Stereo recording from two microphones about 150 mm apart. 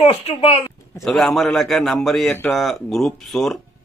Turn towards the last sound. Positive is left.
turn(degrees=0)  # may be behind; listen again after turning